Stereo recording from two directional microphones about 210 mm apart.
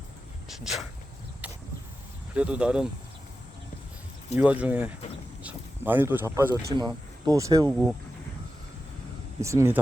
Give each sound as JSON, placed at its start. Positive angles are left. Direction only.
{"t": 0.4, "sound": "speech", "side_deg": 0}
{"t": 2.3, "sound": "speech", "side_deg": -5}
{"t": 4.4, "sound": "speech", "side_deg": -5}
{"t": 9.4, "sound": "speech", "side_deg": -15}